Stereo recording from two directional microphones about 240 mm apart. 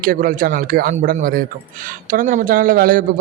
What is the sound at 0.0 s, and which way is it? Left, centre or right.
A man's voice, right.